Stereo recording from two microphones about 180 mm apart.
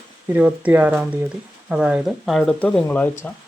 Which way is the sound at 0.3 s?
10° right (ahead or behind).